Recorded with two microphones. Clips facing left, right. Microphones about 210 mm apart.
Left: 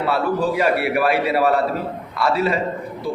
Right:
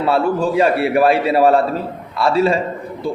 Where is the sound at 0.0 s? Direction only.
25° right (ahead or behind).